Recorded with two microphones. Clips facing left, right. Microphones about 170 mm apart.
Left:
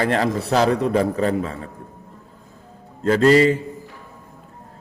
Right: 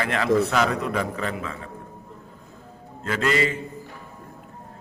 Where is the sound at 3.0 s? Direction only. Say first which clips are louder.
Left 9 dB; 35° left (ahead or behind).